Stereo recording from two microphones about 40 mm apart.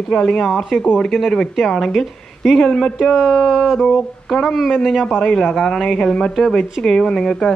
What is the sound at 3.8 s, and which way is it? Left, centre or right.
Speech, centre.